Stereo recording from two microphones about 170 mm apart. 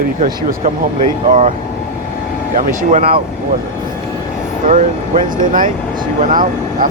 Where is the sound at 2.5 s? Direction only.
50° right (ahead or behind).